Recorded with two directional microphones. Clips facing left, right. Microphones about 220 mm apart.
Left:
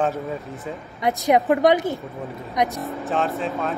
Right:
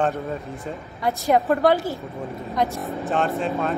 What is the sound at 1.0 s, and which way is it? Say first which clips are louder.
Speech: left 1 dB; 20° left (ahead or behind).